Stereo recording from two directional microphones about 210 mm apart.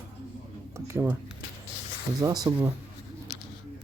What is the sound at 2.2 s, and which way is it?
Speech, 20° right (ahead or behind).